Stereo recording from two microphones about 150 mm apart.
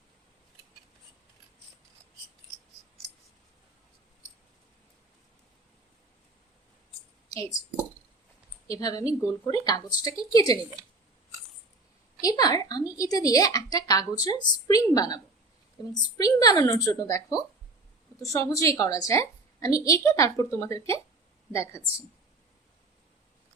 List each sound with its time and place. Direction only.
7.3 s speech: 25° left (ahead or behind)
8.6 s a woman's voice: 25° left (ahead or behind)
12.2 s a woman's voice: 25° left (ahead or behind)